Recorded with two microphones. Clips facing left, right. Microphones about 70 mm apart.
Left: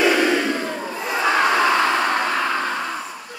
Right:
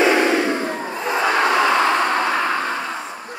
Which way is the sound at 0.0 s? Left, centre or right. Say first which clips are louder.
Right 2 dB; right.